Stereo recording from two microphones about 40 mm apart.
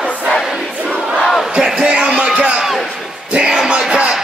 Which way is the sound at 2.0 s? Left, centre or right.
Centre.